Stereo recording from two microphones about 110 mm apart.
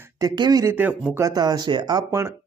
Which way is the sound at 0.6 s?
20° right (ahead or behind).